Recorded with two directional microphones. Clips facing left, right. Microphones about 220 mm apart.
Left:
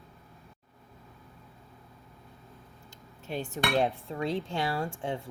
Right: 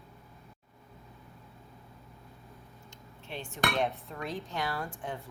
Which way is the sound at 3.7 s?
30° left (ahead or behind).